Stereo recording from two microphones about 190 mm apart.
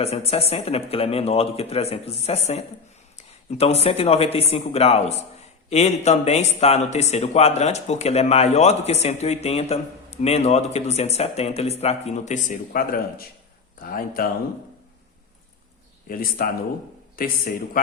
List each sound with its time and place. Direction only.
0.0 s speech: 35° left (ahead or behind); by 14.3 s 50° left (ahead or behind)
16.0 s speech: 50° left (ahead or behind)